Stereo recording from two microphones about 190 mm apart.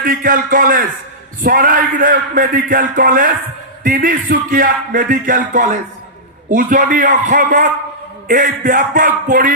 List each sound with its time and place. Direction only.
0.0 s a man's voice: 45° right (ahead or behind)